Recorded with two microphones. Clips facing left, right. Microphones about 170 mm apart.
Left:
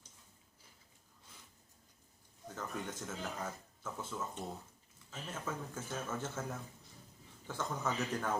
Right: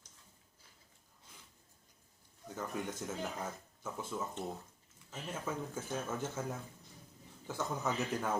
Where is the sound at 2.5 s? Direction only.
10° right (ahead or behind).